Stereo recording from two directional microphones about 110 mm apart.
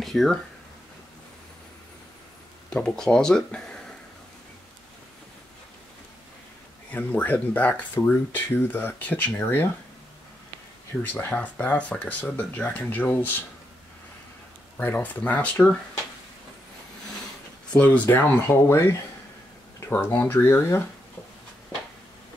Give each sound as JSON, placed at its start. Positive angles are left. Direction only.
{"t": 0.0, "sound": "speech", "side_deg": 0}
{"t": 2.7, "sound": "speech", "side_deg": 5}
{"t": 6.9, "sound": "speech", "side_deg": 15}
{"t": 11.0, "sound": "speech", "side_deg": 15}
{"t": 14.8, "sound": "speech", "side_deg": 15}
{"t": 17.7, "sound": "speech", "side_deg": 15}
{"t": 20.2, "sound": "speech", "side_deg": 20}